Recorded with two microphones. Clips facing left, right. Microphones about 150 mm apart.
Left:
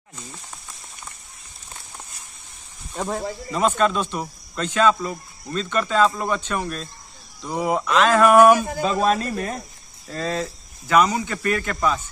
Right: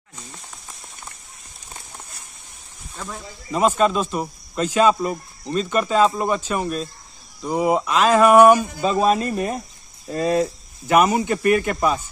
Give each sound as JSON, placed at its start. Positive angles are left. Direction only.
{"t": 3.0, "sound": "speech", "side_deg": 70}
{"t": 3.5, "sound": "speech", "side_deg": -5}